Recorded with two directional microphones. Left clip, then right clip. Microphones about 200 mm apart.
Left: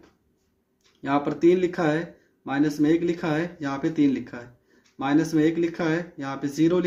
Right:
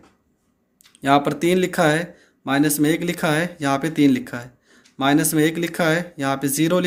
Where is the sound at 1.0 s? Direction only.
35° right (ahead or behind).